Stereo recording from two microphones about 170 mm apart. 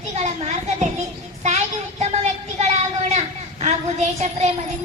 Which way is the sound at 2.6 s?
45° right (ahead or behind).